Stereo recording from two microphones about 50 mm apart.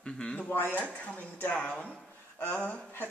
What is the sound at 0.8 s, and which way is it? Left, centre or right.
Speech, left.